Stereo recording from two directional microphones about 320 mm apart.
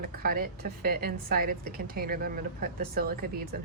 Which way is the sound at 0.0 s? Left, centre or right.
Right.